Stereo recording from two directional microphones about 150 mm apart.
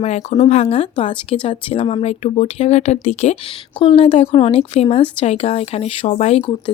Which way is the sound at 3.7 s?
35° left (ahead or behind).